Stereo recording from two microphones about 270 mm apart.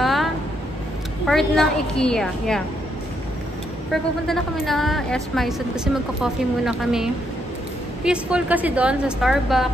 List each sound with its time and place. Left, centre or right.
0.0 s a sound: centre
1.2 s a woman's voice: centre
3.9 s a woman's voice: centre